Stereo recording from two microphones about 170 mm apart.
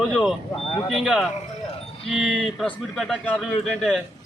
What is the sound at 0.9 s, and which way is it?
Speech, 5° right (ahead or behind).